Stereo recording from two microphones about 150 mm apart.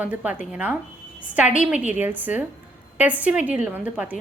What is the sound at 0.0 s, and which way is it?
A woman's voice, 10° right (ahead or behind).